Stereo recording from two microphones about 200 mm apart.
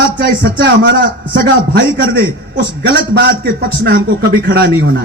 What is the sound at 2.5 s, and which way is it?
A man's voice, 50° right (ahead or behind).